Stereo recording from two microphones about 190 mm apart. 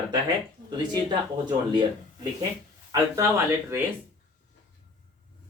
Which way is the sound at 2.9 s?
15° right (ahead or behind).